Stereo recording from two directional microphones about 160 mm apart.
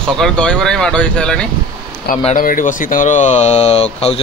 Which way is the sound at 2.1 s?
65° left (ahead or behind).